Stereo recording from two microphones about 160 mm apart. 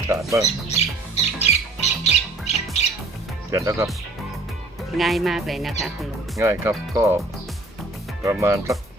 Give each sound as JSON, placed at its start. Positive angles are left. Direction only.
{"t": 0.1, "sound": "speech", "side_deg": -20}
{"t": 0.4, "sound": "squawk", "side_deg": 45}
{"t": 3.5, "sound": "speech", "side_deg": -20}
{"t": 4.9, "sound": "speech", "side_deg": 0}
{"t": 6.4, "sound": "speech", "side_deg": -15}
{"t": 8.2, "sound": "speech", "side_deg": -15}